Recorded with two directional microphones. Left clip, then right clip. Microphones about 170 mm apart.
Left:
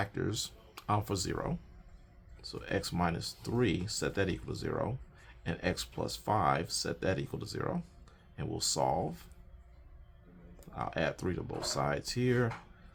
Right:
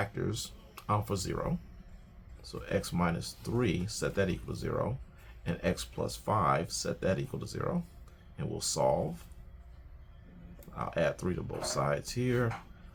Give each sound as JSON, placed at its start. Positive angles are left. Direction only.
{"t": 0.0, "sound": "speech", "side_deg": 60}
{"t": 10.8, "sound": "speech", "side_deg": 55}